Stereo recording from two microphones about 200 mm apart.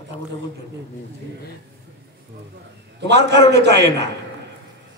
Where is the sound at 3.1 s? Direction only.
60° right (ahead or behind).